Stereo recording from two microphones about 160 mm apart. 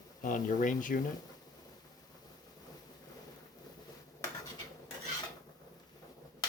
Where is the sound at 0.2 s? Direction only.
55° left (ahead or behind).